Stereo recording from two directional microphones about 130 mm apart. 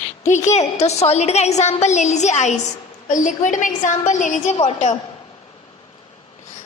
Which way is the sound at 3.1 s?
75° left (ahead or behind).